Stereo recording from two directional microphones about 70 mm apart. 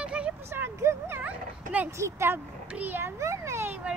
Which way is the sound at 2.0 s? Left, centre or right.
Right.